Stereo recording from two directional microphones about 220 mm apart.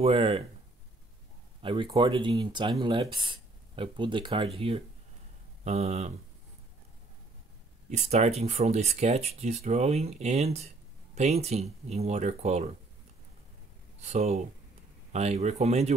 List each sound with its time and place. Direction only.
0.0 s speech: 25° right (ahead or behind)
1.6 s speech: 20° right (ahead or behind)
7.9 s speech: 30° right (ahead or behind)
14.0 s speech: 30° right (ahead or behind)